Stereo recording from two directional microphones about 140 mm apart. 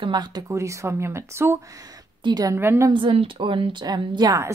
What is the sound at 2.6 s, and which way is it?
Speech, 20° right (ahead or behind).